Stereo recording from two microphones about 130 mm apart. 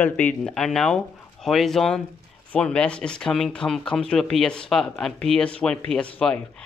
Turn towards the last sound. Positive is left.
turn(degrees=5)  # may be behind; listen again after turning